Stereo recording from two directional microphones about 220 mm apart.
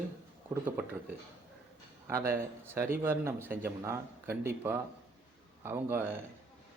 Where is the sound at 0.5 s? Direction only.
10° right (ahead or behind).